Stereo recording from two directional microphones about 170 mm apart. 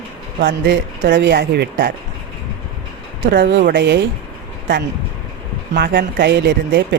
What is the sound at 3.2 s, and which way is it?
Speech, 65° right (ahead or behind).